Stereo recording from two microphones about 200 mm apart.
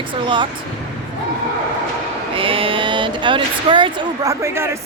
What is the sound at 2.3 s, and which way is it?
Speech, 25° right (ahead or behind).